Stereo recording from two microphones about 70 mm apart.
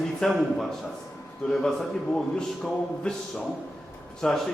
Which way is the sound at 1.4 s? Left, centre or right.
Centre.